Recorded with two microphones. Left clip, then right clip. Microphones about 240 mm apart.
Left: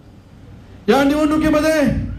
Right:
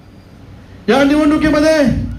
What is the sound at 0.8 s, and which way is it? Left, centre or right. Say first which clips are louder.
Speech: right 3 dB; left.